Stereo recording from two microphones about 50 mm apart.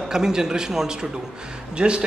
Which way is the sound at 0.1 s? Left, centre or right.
Centre.